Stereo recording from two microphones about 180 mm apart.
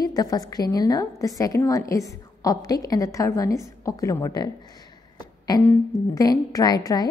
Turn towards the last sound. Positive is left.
turn(degrees=20)  # may be behind; listen again after turning